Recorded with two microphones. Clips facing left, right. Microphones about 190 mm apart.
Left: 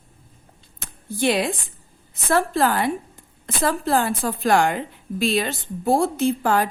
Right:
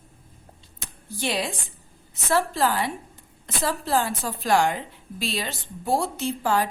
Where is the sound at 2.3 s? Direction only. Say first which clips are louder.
Left 3 dB; 55° left (ahead or behind).